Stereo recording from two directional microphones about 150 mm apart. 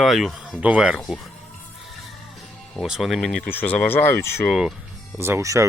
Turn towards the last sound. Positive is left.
turn(degrees=-20)  # may be behind; listen again after turning